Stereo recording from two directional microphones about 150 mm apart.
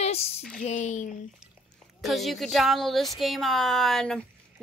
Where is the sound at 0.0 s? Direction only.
40° left (ahead or behind).